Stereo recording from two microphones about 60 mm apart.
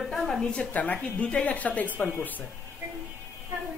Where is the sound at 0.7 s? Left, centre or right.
Left.